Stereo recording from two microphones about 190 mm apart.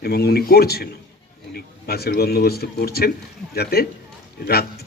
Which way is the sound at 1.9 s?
55° left (ahead or behind).